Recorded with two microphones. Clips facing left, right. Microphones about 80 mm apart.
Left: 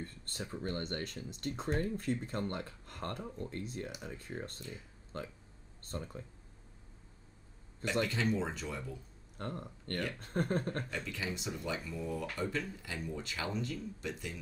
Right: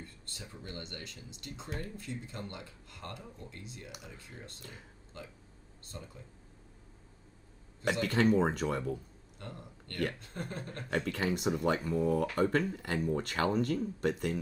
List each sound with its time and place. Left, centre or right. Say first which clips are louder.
0.0 s speech: left 5 dB; left
4.6 s speech: left 3 dB; right
5.1 s speech: left 5 dB; left
8.1 s speech: right 7 dB; right
9.4 s speech: left 5 dB; left
10.9 s speech: right 7 dB; right